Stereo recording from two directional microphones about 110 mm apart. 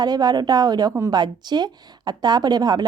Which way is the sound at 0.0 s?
40° right (ahead or behind).